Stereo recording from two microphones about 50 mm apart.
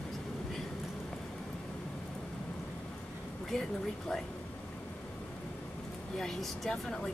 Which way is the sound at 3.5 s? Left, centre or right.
Centre.